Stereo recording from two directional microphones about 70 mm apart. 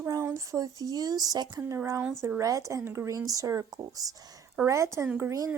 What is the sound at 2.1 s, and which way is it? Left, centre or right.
Speech, right.